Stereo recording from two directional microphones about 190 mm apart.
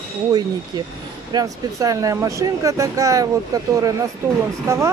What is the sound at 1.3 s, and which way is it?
Speech, 20° right (ahead or behind).